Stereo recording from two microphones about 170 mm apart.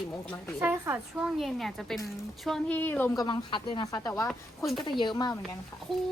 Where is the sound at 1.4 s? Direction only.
Centre (ahead or behind).